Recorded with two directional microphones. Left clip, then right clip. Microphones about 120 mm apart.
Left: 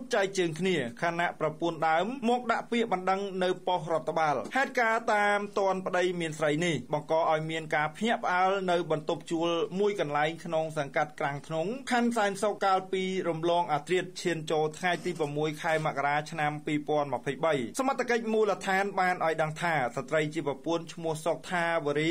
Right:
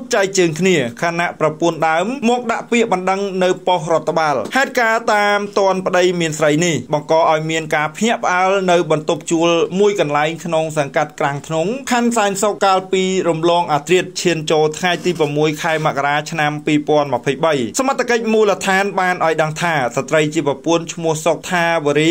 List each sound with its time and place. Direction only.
0.1 s speech: 15° right (ahead or behind)